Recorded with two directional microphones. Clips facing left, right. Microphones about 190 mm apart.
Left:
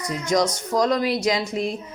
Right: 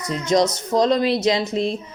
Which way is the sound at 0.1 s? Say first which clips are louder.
Right 3 dB; 25° right (ahead or behind).